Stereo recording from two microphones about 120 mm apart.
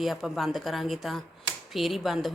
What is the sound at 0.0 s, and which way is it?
A woman's voice, centre (ahead or behind).